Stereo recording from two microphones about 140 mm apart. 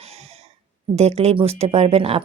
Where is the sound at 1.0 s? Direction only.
50° right (ahead or behind).